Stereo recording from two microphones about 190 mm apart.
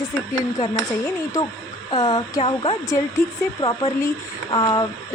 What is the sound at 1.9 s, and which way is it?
Speech, 25° left (ahead or behind).